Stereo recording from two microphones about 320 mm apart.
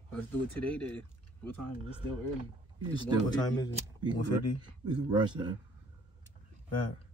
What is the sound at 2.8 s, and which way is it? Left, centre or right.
Speech, centre.